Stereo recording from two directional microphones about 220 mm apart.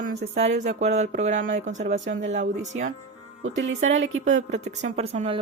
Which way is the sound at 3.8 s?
60° right (ahead or behind).